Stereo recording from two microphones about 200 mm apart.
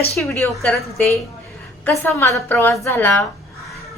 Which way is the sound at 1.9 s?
10° left (ahead or behind).